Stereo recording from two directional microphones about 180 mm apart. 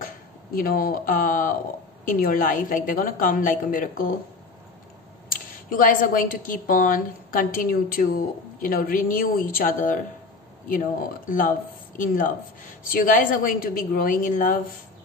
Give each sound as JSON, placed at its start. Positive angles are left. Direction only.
{"t": 0.6, "sound": "a woman's voice", "side_deg": 50}
{"t": 5.3, "sound": "a woman's voice", "side_deg": 50}